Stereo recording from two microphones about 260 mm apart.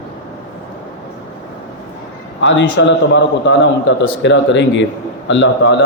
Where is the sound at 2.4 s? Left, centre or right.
Left.